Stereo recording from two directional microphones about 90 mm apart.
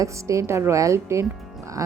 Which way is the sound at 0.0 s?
35° right (ahead or behind).